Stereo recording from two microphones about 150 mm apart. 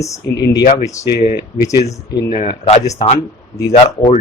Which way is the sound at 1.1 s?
90° left.